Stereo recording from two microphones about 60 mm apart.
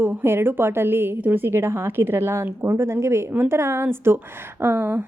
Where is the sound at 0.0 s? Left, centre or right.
Right.